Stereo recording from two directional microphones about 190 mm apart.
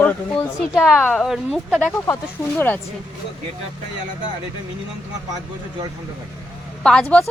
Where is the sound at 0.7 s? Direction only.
Centre (ahead or behind).